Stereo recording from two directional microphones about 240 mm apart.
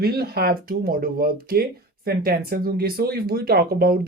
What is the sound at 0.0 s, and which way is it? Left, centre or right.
Speech, right.